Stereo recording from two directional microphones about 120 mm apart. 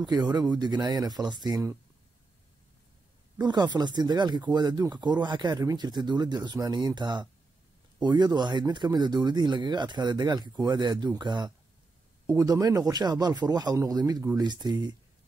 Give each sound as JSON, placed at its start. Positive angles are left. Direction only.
{"t": 0.0, "sound": "speech", "side_deg": -35}
{"t": 3.3, "sound": "speech", "side_deg": -35}